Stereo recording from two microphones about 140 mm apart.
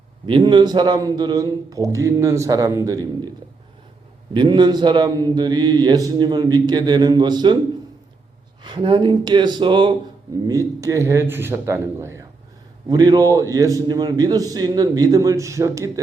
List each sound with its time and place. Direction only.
0.3 s a man's voice: 35° right (ahead or behind)
4.4 s mantra: 30° right (ahead or behind)
8.6 s mantra: 35° right (ahead or behind)
10.4 s a man's voice: 25° right (ahead or behind)